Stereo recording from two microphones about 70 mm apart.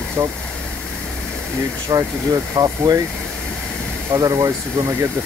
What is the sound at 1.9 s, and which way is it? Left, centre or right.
Speech, right.